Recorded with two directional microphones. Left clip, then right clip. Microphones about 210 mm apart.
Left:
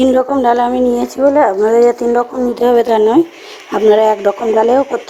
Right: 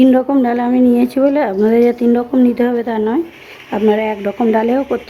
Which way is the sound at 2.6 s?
35° left (ahead or behind).